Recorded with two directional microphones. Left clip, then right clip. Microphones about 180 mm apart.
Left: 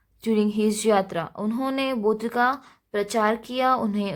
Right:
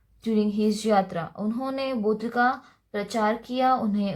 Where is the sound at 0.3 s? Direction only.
35° left (ahead or behind).